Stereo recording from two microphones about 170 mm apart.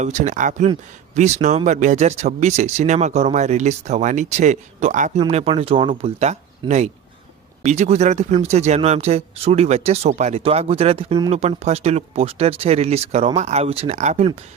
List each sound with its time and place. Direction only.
0.0 s speech: 45° right (ahead or behind)